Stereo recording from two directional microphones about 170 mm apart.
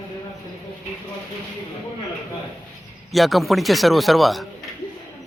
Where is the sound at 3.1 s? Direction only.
Centre (ahead or behind).